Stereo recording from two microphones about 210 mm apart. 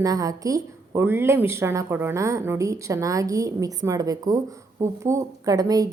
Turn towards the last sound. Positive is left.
turn(degrees=-15)  # may be behind; listen again after turning